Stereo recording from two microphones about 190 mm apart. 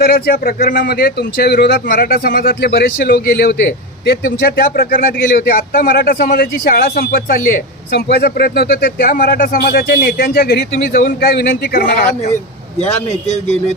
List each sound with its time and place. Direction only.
0.0 s a man's voice: 55° left (ahead or behind)
12.8 s a man's voice: 35° left (ahead or behind)